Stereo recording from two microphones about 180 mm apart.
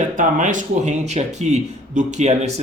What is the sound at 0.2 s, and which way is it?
A man's voice, 45° right (ahead or behind).